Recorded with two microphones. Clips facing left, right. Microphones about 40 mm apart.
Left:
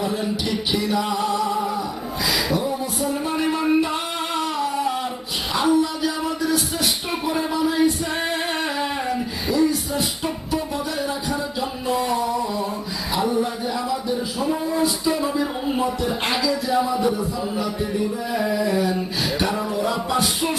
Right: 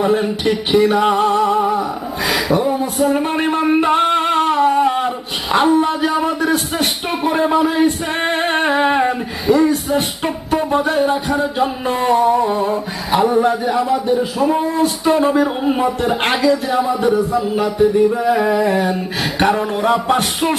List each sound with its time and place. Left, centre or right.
0.0 s music: right
2.2 s a sound: right
5.6 s music: right